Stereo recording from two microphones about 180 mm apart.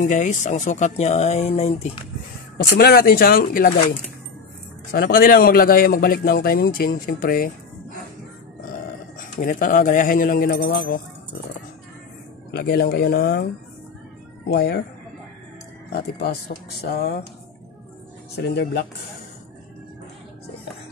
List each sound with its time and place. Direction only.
0.0 s speech: 45° left (ahead or behind)
2.8 s speech: 60° left (ahead or behind)
4.9 s a man's voice: 55° left (ahead or behind)
9.2 s a man's voice: 50° left (ahead or behind); by 10.9 s 80° left
12.4 s speech: 60° left (ahead or behind)
14.5 s speech: 65° left (ahead or behind)
15.9 s speech: 65° left (ahead or behind)
18.3 s speech: 70° left (ahead or behind)